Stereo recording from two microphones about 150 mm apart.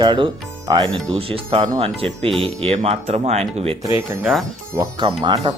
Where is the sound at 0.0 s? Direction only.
30° right (ahead or behind).